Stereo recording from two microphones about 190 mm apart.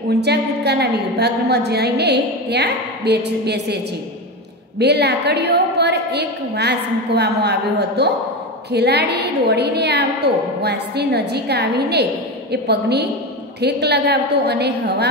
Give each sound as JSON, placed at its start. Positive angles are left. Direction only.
{"t": 0.1, "sound": "a woman's voice", "side_deg": -60}